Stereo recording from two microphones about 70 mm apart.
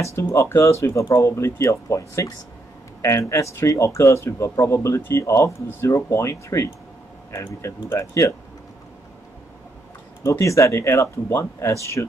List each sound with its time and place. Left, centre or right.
0.0 s speech: left
10.4 s speech: left